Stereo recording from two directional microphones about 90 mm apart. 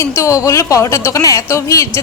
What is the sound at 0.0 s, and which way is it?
A woman's voice, 35° left (ahead or behind).